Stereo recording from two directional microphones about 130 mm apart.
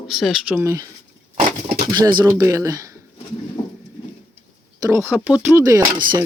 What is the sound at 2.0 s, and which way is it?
Speech, 35° right (ahead or behind).